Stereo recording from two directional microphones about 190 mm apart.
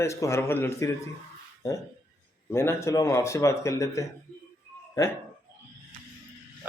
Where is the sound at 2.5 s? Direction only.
15° left (ahead or behind).